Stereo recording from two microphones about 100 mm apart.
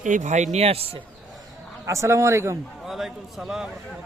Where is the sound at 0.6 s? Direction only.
80° right.